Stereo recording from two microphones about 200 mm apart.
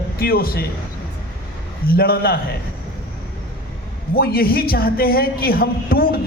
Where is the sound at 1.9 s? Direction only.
50° left (ahead or behind).